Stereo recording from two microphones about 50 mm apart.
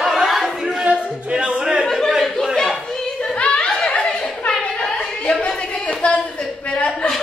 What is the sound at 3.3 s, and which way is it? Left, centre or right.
Chuckle, left.